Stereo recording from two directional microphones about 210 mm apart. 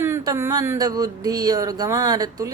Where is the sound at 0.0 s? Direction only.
10° right (ahead or behind).